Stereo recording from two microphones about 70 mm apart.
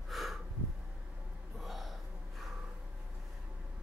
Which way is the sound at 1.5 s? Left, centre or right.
Centre.